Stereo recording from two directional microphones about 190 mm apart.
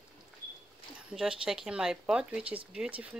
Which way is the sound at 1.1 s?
5° right (ahead or behind).